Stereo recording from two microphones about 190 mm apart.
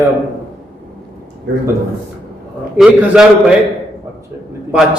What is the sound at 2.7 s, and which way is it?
Speech, 5° right (ahead or behind).